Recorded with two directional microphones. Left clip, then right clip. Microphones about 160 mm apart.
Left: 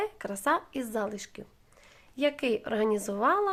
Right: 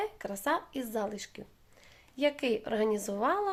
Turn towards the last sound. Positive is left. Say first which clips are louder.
# left 4 dB
turn(degrees=25)  # may be behind; listen again after turning